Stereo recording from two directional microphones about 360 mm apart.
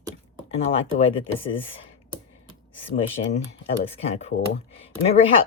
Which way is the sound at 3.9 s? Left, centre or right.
Centre.